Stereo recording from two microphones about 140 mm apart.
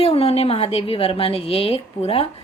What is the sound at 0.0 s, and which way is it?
A woman's voice, 45° left (ahead or behind).